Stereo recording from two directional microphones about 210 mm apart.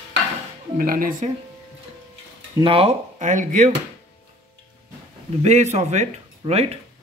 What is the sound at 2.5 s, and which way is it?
Speech, 25° right (ahead or behind).